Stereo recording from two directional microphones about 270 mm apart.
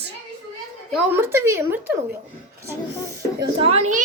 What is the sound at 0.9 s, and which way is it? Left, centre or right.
Speech, centre.